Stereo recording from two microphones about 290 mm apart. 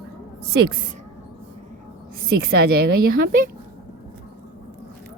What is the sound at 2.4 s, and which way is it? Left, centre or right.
Speech, right.